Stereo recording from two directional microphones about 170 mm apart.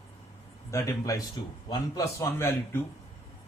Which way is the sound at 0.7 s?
20° left (ahead or behind).